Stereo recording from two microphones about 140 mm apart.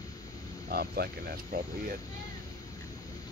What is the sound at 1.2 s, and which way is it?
Speech, 90° right.